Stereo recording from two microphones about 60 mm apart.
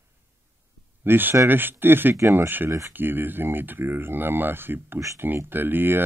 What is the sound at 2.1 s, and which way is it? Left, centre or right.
Speech, right.